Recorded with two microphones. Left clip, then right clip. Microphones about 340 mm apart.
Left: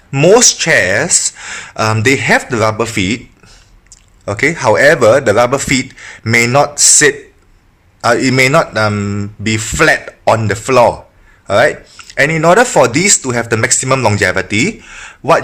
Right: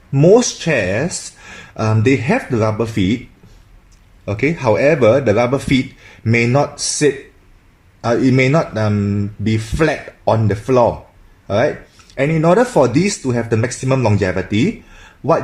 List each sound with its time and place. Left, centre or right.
0.3 s speech: left
4.3 s speech: left